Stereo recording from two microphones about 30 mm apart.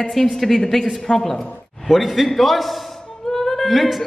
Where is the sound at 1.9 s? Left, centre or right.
Centre.